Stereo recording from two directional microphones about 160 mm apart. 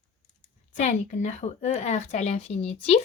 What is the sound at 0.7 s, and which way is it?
Speech, 50° left (ahead or behind).